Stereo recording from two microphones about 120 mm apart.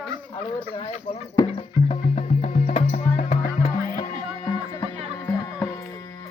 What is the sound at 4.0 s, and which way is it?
Music, 45° left (ahead or behind).